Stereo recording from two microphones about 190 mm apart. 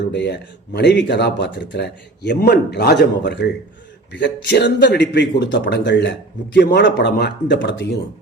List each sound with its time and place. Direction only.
0.0 s speech: 65° left (ahead or behind)